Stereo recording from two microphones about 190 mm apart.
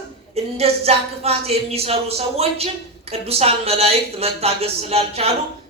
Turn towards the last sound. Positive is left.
turn(degrees=-35)  # may be behind; listen again after turning